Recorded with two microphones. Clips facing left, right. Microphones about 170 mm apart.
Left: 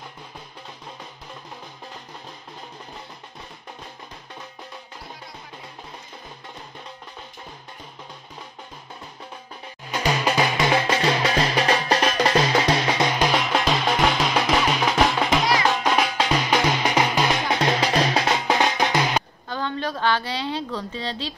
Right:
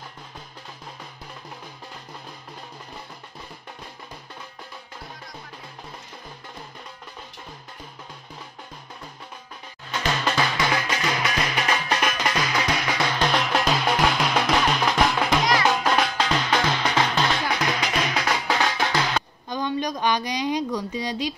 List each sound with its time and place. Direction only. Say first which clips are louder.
10.2 s music: left 3 dB; 15° left (ahead or behind)
13.2 s music: left 1 dB; 5° left (ahead or behind)
17.4 s music: left 3 dB; 25° left (ahead or behind)
19.5 s a sound: right 1 dB; 15° right (ahead or behind)